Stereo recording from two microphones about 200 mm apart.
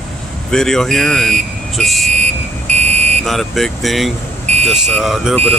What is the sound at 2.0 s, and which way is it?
Car alarm, 35° right (ahead or behind).